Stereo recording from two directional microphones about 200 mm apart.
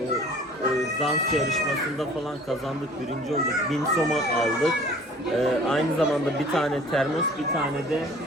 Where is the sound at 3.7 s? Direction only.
Centre (ahead or behind).